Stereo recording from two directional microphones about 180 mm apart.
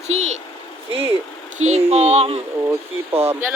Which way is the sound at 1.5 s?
40° right (ahead or behind).